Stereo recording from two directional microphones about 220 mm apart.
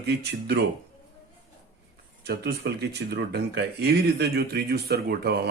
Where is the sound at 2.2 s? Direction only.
50° right (ahead or behind).